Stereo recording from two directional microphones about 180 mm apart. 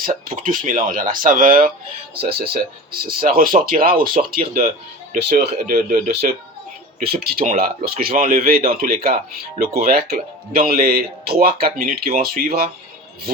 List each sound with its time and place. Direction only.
0.0 s speech: 50° right (ahead or behind)